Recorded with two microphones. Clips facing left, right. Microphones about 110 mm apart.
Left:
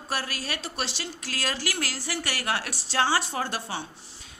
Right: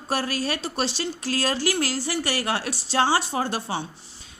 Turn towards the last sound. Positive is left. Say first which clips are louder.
# right 4 dB
turn(degrees=-25)  # may be behind; listen again after turning